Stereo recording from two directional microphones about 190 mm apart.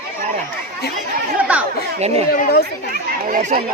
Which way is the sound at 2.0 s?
35° right (ahead or behind).